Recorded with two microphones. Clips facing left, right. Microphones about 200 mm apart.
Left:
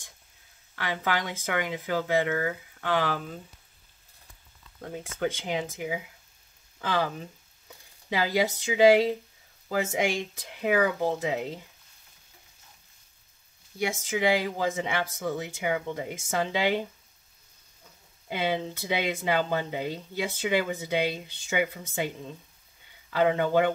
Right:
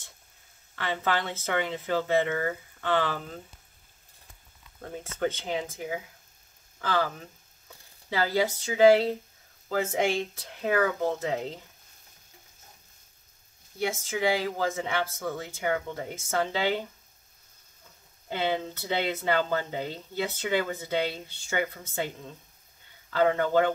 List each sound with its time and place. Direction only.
0.7 s speech: 10° left (ahead or behind)
4.8 s speech: 10° left (ahead or behind)
13.7 s speech: 15° left (ahead or behind)
18.3 s speech: 10° left (ahead or behind)